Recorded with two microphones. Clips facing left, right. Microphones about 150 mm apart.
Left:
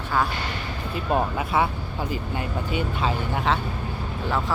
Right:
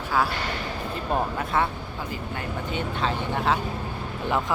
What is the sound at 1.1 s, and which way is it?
Speech, 5° left (ahead or behind).